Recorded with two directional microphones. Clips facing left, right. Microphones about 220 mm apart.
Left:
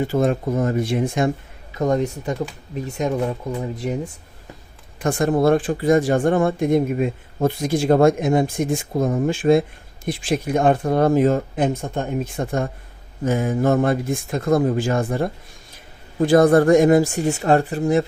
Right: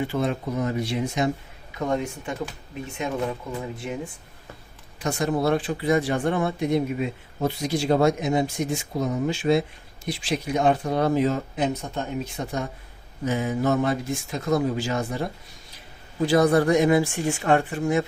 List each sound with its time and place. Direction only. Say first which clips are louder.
0.0 s speech: left 6 dB; 45° left (ahead or behind)
1.8 s speech: left 6 dB; 40° left (ahead or behind)
3.6 s speech: left 6 dB; 40° left (ahead or behind)
4.9 s speech: left 6 dB; 55° left (ahead or behind); by 18.0 s 35° left (ahead or behind)